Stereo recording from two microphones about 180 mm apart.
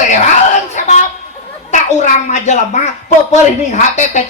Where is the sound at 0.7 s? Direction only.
45° left (ahead or behind).